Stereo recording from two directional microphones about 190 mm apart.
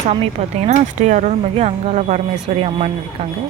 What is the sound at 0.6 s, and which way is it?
Speech, 40° right (ahead or behind).